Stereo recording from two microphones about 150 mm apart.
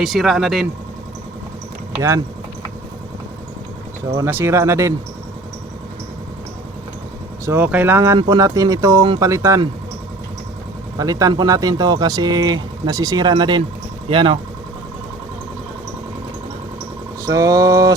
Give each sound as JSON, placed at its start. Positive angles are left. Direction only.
{"t": 0.0, "sound": "speech", "side_deg": 0}
{"t": 2.0, "sound": "speech", "side_deg": -20}
{"t": 4.3, "sound": "speech", "side_deg": -15}
{"t": 7.4, "sound": "speech", "side_deg": -15}
{"t": 10.9, "sound": "speech", "side_deg": -25}
{"t": 17.2, "sound": "speech", "side_deg": -20}